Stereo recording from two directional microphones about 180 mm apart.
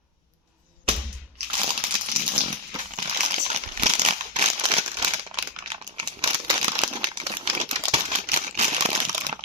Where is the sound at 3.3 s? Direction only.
40° right (ahead or behind).